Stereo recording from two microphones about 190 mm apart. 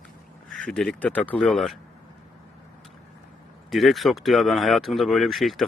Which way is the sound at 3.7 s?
Centre (ahead or behind).